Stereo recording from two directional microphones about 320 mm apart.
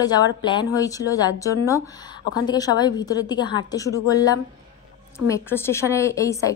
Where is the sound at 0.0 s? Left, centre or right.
Centre.